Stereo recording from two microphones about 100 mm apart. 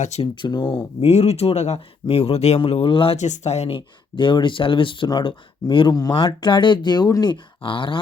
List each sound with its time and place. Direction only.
0.4 s speech: 55° left (ahead or behind)
1.0 s speech: 90° left
3.8 s speech: 55° left (ahead or behind)
5.0 s speech: 45° left (ahead or behind)
5.9 s speech: 40° left (ahead or behind); by 7.9 s 55° left (ahead or behind)